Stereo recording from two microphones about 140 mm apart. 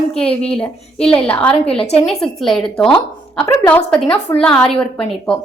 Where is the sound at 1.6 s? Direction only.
45° left (ahead or behind).